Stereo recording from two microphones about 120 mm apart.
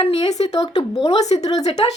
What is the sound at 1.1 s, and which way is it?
Speech, 65° left (ahead or behind).